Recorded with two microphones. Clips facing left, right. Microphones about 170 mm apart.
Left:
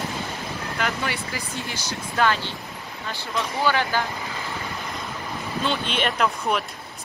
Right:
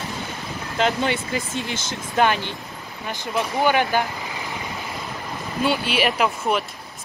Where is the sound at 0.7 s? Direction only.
20° right (ahead or behind).